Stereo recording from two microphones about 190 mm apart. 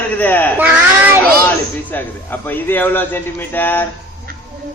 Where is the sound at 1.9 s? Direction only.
10° left (ahead or behind).